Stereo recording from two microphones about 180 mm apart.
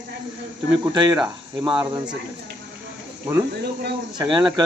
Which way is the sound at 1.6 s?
25° right (ahead or behind).